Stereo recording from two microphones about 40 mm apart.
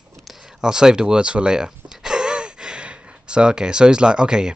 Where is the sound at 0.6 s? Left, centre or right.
Centre.